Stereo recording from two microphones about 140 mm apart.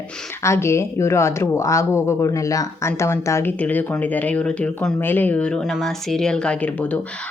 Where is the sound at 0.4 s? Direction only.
20° left (ahead or behind).